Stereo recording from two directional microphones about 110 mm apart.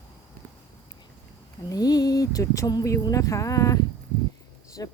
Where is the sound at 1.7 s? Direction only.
35° left (ahead or behind).